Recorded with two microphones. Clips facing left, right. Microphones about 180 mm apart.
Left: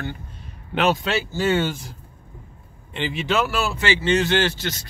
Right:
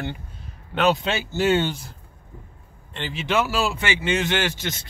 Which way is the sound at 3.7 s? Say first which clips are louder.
Left 4 dB; 15° right (ahead or behind).